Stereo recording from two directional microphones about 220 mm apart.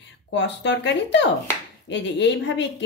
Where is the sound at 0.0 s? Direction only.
55° left (ahead or behind).